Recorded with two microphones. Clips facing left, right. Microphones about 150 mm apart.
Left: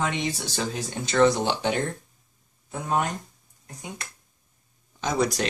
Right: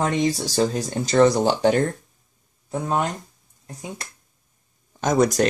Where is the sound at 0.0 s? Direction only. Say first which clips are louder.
Right 6 dB; 40° right (ahead or behind).